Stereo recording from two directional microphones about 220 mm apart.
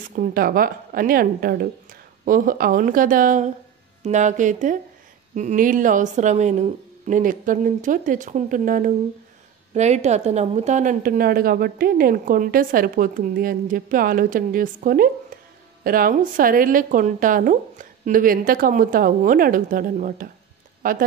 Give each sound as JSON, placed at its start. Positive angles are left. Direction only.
{"t": 0.1, "sound": "a woman's voice", "side_deg": -40}